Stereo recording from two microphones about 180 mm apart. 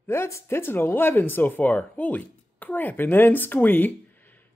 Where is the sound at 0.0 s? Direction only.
15° left (ahead or behind).